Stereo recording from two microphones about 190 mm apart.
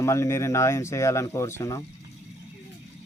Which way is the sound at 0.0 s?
15° left (ahead or behind).